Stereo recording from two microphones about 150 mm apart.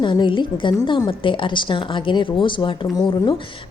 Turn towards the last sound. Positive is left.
turn(degrees=30)  # may be behind; listen again after turning